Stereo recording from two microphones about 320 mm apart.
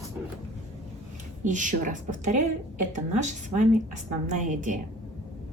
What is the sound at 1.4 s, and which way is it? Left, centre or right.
A woman's voice, right.